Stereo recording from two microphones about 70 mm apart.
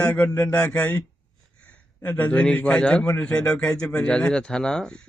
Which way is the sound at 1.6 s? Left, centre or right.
Left.